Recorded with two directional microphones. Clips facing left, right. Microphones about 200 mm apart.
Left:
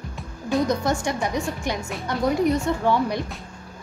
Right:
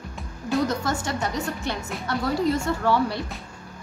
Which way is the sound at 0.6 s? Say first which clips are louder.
Left 3 dB; 15° left (ahead or behind).